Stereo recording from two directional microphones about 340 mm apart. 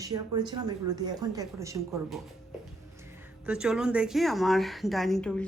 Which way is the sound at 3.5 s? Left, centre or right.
Centre.